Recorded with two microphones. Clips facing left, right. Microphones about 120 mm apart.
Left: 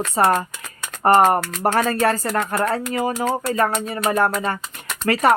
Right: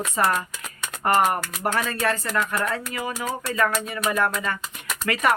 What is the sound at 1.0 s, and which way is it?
Speech, 35° left (ahead or behind).